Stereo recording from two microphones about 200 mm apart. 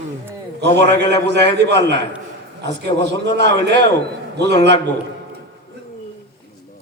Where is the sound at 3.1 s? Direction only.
60° right (ahead or behind).